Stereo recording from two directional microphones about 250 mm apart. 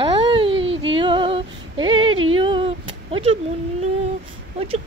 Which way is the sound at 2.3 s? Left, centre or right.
Centre.